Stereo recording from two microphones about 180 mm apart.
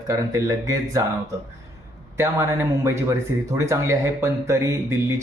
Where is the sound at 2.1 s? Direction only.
15° right (ahead or behind).